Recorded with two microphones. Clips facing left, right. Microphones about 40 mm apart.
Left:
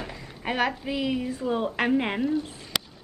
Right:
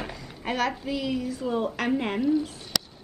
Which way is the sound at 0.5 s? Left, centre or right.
Left.